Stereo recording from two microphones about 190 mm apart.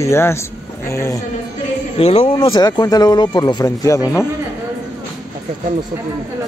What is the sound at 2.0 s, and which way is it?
Speech, 30° left (ahead or behind).